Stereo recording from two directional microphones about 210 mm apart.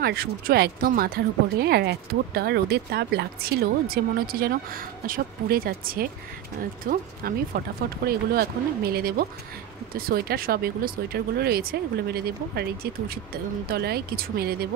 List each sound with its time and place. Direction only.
0.0 s speech: 45° right (ahead or behind)